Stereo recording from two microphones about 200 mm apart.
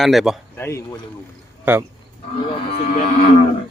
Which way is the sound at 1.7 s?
10° right (ahead or behind).